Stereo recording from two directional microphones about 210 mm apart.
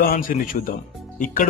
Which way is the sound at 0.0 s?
40° left (ahead or behind).